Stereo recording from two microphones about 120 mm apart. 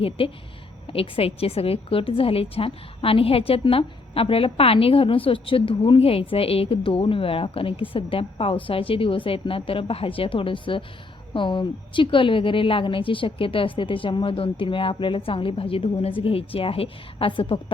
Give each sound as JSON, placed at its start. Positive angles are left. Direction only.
{"t": 0.2, "sound": "a woman's voice", "side_deg": 45}